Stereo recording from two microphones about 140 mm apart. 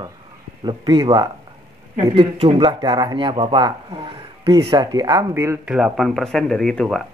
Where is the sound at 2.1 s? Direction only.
45° right (ahead or behind).